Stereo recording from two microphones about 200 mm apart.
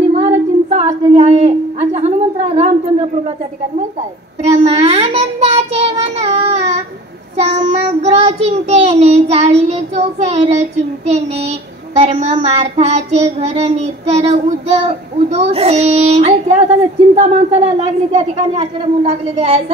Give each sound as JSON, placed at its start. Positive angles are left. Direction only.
{"t": 0.2, "sound": "a sound", "side_deg": -30}
{"t": 4.4, "sound": "child singing", "side_deg": -30}
{"t": 12.0, "sound": "child singing", "side_deg": -30}